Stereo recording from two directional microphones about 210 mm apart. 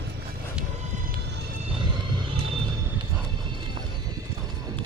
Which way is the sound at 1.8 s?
25° right (ahead or behind).